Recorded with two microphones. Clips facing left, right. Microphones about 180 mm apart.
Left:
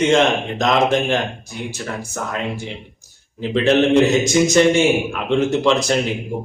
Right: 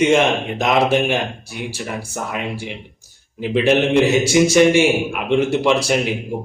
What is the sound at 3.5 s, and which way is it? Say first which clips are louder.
Speech: left 1 dB; 10° right (ahead or behind).